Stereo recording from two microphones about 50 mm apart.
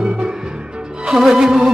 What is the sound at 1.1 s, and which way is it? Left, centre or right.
Music, centre.